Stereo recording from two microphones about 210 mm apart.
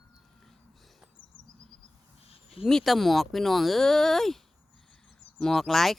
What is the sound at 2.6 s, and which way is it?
Speech, centre (ahead or behind).